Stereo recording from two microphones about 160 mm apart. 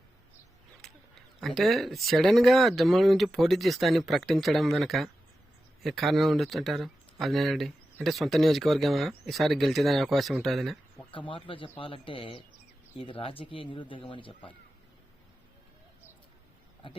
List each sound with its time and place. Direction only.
1.4 s speech: centre (ahead or behind)
11.1 s speech: 30° left (ahead or behind)